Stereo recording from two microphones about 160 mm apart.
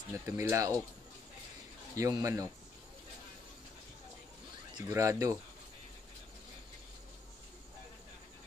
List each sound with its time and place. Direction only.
0.1 s speech: 20° right (ahead or behind)
2.0 s a man's voice: 20° right (ahead or behind)
4.8 s a man's voice: 20° right (ahead or behind)